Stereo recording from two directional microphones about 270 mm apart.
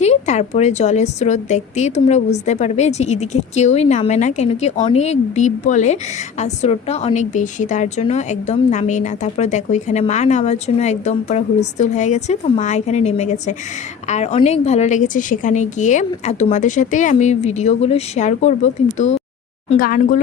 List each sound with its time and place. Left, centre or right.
0.0 s a woman's voice: left